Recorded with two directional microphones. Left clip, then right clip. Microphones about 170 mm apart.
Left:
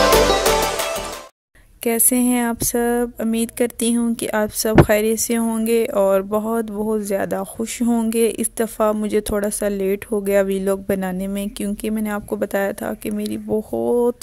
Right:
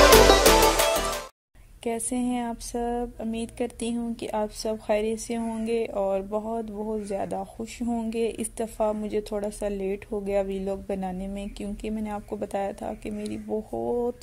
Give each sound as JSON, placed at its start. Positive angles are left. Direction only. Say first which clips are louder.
{"t": 0.1, "sound": "music", "louder": "left 1 dB", "side_deg": 0}
{"t": 1.9, "sound": "speech", "louder": "left 9 dB", "side_deg": 35}